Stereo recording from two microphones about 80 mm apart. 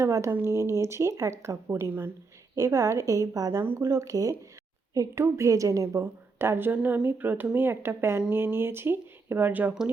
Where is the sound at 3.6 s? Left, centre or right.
Right.